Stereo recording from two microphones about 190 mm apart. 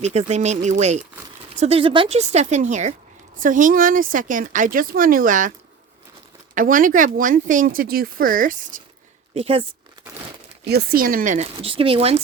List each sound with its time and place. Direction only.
0.0 s speech: 35° right (ahead or behind)
6.5 s speech: 45° right (ahead or behind)
9.3 s speech: 30° right (ahead or behind)
10.7 s speech: 55° right (ahead or behind); by 12.2 s 30° right (ahead or behind)